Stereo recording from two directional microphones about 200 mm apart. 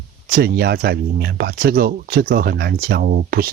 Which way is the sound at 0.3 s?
50° right (ahead or behind).